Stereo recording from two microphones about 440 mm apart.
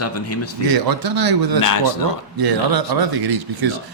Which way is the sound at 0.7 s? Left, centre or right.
Right.